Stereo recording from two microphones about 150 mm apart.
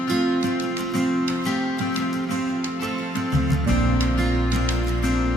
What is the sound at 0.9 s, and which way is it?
Music, centre (ahead or behind).